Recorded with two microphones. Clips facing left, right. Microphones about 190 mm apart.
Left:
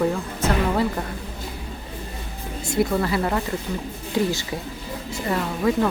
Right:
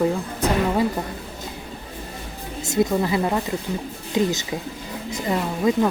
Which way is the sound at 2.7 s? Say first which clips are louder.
Right 1 dB; 20° right (ahead or behind).